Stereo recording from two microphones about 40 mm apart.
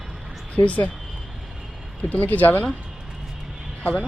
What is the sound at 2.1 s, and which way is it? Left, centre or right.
Speech, left.